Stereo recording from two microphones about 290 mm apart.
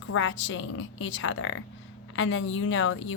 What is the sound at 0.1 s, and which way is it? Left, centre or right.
A woman's voice, left.